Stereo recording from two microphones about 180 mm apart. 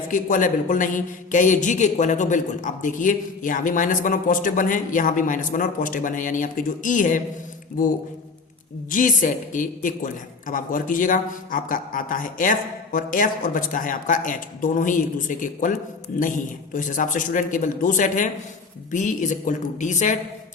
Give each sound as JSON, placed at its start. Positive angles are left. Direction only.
{"t": 0.1, "sound": "a man's voice", "side_deg": 45}
{"t": 8.9, "sound": "a man's voice", "side_deg": 45}